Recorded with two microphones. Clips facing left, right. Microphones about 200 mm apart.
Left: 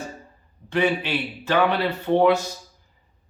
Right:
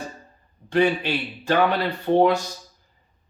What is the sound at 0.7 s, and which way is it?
Speech, 45° right (ahead or behind).